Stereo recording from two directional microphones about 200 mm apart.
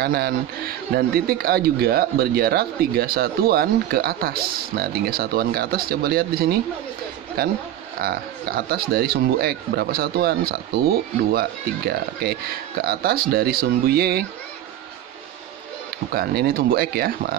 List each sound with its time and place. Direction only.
0.0 s a man's voice: 50° right (ahead or behind)
16.1 s a man's voice: 50° right (ahead or behind)